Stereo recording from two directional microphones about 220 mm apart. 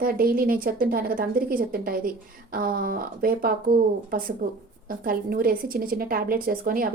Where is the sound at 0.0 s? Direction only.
40° right (ahead or behind).